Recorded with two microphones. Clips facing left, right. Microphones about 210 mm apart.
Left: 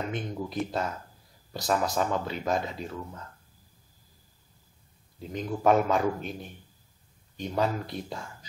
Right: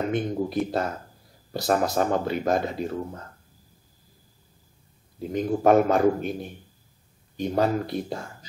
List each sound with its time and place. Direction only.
0.1 s a man's voice: 45° right (ahead or behind)
5.3 s a man's voice: 50° right (ahead or behind)